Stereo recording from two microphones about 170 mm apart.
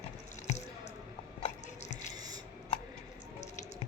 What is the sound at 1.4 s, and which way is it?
Biting, 40° left (ahead or behind).